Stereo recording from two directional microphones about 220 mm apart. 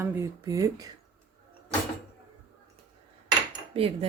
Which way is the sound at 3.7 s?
25° right (ahead or behind).